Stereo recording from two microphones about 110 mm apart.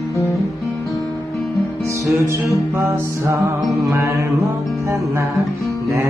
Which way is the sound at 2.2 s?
25° right (ahead or behind).